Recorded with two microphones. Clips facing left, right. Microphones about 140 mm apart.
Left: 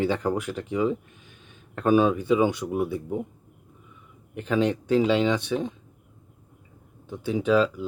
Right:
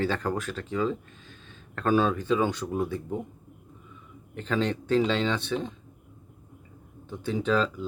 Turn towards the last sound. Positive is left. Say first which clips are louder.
# left 4 dB
turn(degrees=10)  # may be behind; listen again after turning